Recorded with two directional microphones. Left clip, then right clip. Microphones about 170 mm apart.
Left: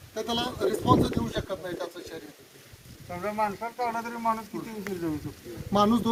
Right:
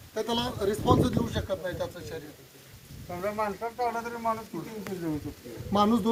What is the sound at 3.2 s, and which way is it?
Speech, 65° right (ahead or behind).